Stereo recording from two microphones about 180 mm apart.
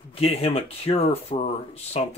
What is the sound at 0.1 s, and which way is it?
Speech, 35° left (ahead or behind).